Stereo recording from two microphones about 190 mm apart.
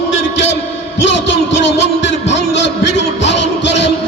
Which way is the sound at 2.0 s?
70° left (ahead or behind).